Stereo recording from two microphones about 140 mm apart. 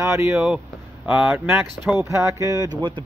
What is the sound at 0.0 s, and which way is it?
Speech, 20° right (ahead or behind).